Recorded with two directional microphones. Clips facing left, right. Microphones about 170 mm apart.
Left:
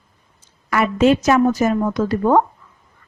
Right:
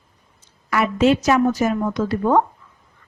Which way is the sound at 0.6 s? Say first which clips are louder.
Left 2 dB; 50° left (ahead or behind).